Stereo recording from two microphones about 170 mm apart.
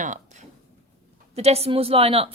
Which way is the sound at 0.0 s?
45° right (ahead or behind).